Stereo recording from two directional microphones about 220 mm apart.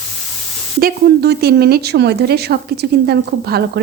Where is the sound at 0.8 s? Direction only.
45° right (ahead or behind).